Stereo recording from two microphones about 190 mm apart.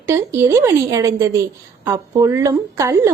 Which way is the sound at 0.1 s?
15° right (ahead or behind).